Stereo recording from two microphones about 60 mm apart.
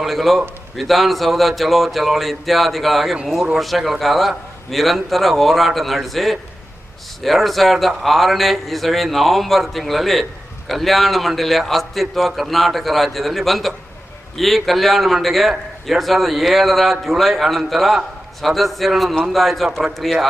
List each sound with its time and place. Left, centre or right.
0.0 s a man's voice: centre